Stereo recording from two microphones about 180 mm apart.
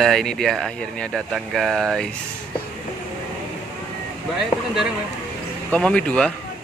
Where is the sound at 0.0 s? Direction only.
Centre (ahead or behind).